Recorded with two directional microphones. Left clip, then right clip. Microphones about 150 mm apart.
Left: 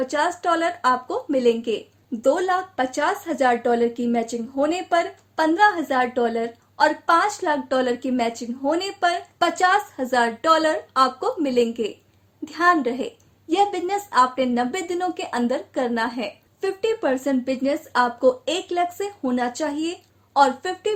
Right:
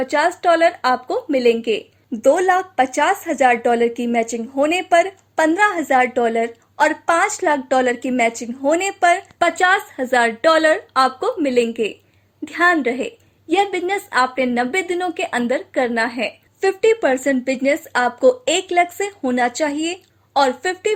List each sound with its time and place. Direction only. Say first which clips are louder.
0.0 s a woman's voice: right 5 dB; 30° right (ahead or behind)
16.6 s a woman's voice: right 8 dB; 35° right (ahead or behind)
17.6 s speech: right 2 dB; 20° right (ahead or behind)